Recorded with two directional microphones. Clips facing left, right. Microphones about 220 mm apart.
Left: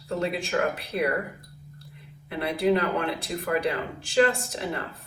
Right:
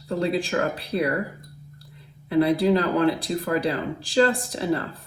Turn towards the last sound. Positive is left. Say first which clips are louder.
# right 6 dB
turn(degrees=-35)  # may be behind; listen again after turning